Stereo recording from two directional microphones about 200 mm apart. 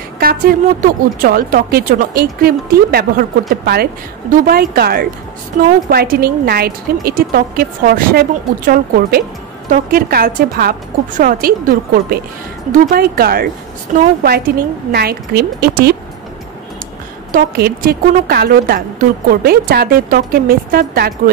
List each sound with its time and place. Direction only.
0.2 s a woman's voice: 50° right (ahead or behind)
17.3 s a woman's voice: 50° right (ahead or behind)